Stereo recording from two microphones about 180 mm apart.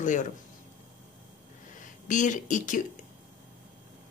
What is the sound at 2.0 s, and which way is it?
Speech, 45° left (ahead or behind).